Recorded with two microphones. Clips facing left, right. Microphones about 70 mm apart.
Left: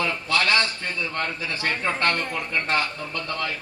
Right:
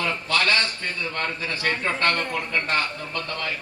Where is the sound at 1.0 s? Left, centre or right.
Right.